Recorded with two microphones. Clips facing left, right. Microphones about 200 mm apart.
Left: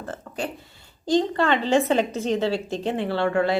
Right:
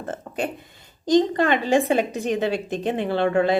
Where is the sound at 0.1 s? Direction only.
20° right (ahead or behind).